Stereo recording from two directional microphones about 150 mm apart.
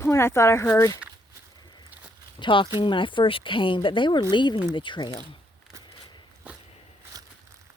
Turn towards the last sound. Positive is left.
turn(degrees=-25)  # may be behind; listen again after turning